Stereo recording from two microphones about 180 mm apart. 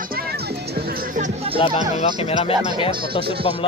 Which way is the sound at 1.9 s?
35° left (ahead or behind).